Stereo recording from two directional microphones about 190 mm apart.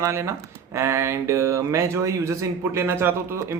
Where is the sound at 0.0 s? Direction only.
15° right (ahead or behind).